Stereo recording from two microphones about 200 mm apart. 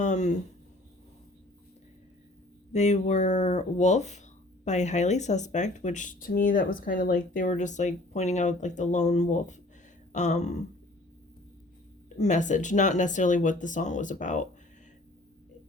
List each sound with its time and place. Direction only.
0.0 s speech: 35° left (ahead or behind)
2.7 s speech: 35° left (ahead or behind)
12.0 s speech: 35° left (ahead or behind)